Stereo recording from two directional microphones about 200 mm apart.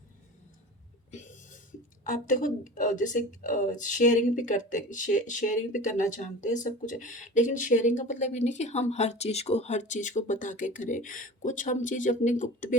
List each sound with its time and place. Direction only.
2.4 s speech: 40° left (ahead or behind)